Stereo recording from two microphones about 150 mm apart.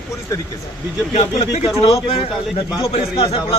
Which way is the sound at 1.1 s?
45° left (ahead or behind).